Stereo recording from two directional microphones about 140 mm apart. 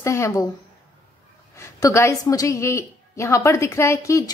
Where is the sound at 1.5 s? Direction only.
25° left (ahead or behind).